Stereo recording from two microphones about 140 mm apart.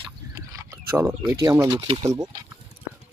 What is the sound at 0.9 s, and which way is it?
Speech, 15° right (ahead or behind).